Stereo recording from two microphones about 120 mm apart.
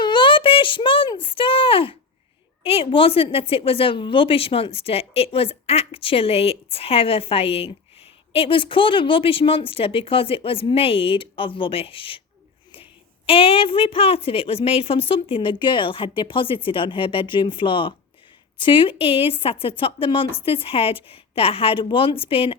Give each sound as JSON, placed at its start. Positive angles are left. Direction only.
{"t": 0.0, "sound": "a sound", "side_deg": 40}
{"t": 2.6, "sound": "a woman's voice", "side_deg": 50}
{"t": 13.2, "sound": "a woman's voice", "side_deg": 50}